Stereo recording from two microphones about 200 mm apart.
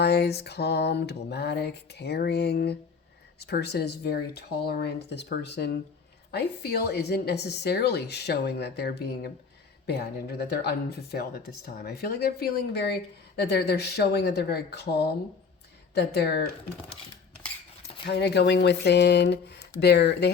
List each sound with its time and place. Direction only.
0.0 s a woman's voice: 55° left (ahead or behind)
18.0 s a woman's voice: 55° left (ahead or behind)